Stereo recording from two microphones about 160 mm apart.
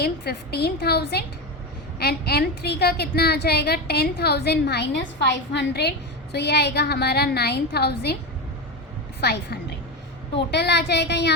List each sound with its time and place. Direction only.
0.0 s a woman's voice: 90° left
9.2 s a woman's voice: 90° left